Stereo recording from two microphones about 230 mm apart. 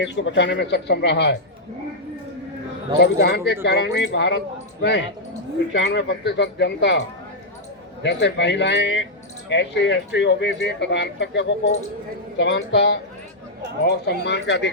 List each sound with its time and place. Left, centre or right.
0.0 s speech: left
3.0 s speech: left
8.0 s speech: left